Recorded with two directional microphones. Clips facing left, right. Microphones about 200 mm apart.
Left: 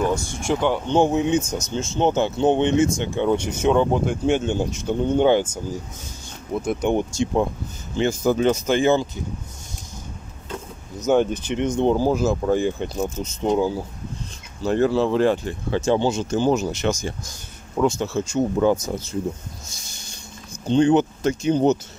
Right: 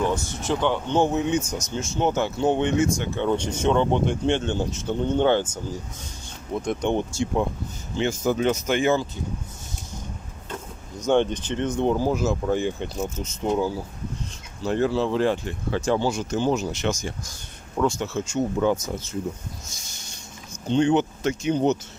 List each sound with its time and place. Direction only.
0.0 s speech: 10° left (ahead or behind)
8.0 s speech: 35° left (ahead or behind)
11.0 s speech: 5° left (ahead or behind)
11.8 s speech: 35° left (ahead or behind)
13.4 s speech: 20° left (ahead or behind)
14.7 s speech: 50° left (ahead or behind)
15.4 s speech: 25° left (ahead or behind)
20.7 s speech: 40° left (ahead or behind)